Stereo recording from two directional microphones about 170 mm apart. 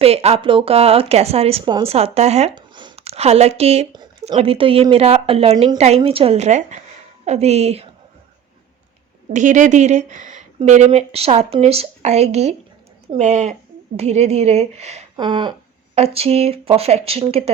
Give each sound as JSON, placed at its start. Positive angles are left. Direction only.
{"t": 0.0, "sound": "speech", "side_deg": -35}
{"t": 2.6, "sound": "speech", "side_deg": -25}
{"t": 9.3, "sound": "speech", "side_deg": -45}
{"t": 15.1, "sound": "a sound", "side_deg": -25}
{"t": 16.0, "sound": "speech", "side_deg": -35}